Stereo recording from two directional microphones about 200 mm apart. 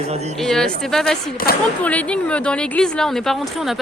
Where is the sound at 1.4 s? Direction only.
50° left (ahead or behind).